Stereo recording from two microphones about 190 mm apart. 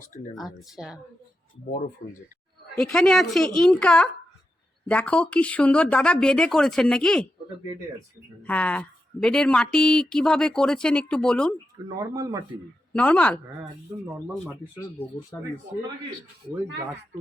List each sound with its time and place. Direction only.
0.3 s speech: centre (ahead or behind)
2.7 s speech: 5° left (ahead or behind)
8.4 s speech: 5° left (ahead or behind)
11.9 s speech: 20° right (ahead or behind)
12.9 s speech: 5° left (ahead or behind)
15.3 s speech: 10° left (ahead or behind)